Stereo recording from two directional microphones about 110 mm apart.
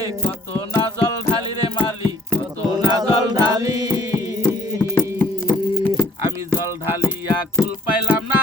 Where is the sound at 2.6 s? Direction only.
35° right (ahead or behind).